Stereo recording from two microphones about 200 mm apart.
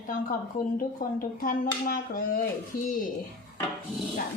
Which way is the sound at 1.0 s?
45° left (ahead or behind).